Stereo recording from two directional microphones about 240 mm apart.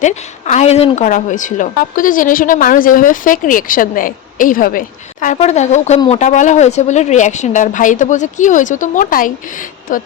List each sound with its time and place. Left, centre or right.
0.0 s a woman's voice: left